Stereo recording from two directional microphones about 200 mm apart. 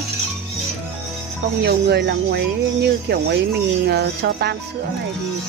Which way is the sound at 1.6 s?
55° right (ahead or behind).